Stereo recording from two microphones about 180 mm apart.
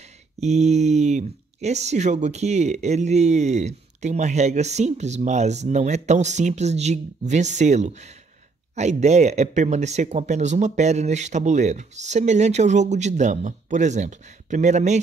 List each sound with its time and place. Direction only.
0.4 s speech: 40° right (ahead or behind)